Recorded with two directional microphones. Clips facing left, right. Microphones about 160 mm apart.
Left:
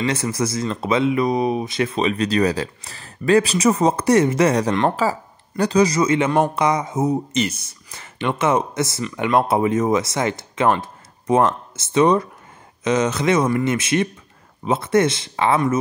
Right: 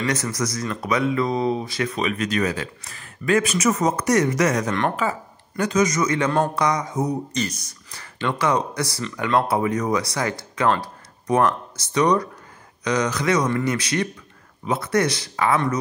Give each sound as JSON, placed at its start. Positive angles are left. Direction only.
{"t": 0.0, "sound": "speech", "side_deg": 25}